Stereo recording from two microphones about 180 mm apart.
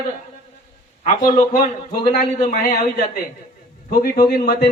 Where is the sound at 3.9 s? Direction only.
55° left (ahead or behind).